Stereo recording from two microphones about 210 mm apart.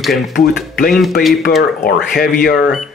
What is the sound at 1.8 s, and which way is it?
Speech, 45° left (ahead or behind).